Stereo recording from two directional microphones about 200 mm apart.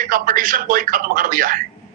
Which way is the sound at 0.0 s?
45° right (ahead or behind).